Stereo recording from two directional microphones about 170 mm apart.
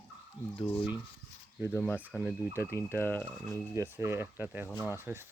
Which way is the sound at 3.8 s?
15° right (ahead or behind).